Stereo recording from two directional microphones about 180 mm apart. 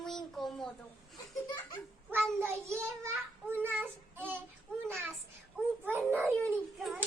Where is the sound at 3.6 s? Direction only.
10° right (ahead or behind).